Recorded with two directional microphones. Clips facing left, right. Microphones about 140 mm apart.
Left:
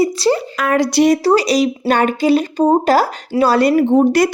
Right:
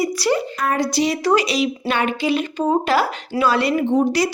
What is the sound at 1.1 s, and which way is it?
Speech, 35° left (ahead or behind).